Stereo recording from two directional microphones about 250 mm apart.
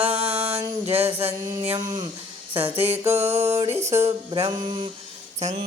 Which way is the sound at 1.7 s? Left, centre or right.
Centre.